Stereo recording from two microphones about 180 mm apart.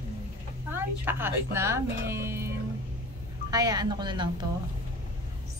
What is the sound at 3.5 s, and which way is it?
Speech, 20° right (ahead or behind).